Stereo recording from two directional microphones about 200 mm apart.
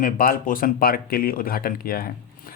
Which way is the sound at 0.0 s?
45° left (ahead or behind).